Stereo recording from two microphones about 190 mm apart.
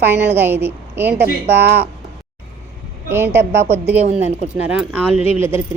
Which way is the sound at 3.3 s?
15° right (ahead or behind).